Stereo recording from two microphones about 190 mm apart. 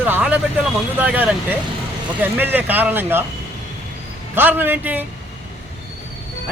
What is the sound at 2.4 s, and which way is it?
Speech, 10° right (ahead or behind).